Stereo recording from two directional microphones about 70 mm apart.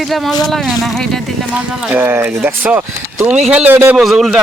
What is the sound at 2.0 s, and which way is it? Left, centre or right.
Speech, right.